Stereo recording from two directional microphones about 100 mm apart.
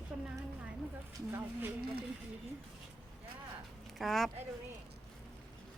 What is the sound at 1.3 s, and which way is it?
Speech, 20° right (ahead or behind).